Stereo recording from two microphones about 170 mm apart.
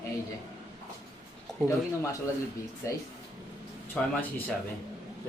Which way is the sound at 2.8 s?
15° left (ahead or behind).